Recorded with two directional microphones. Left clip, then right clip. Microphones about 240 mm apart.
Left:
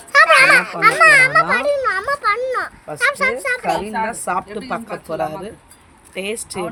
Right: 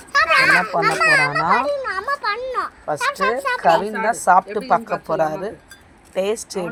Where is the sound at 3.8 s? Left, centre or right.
Centre.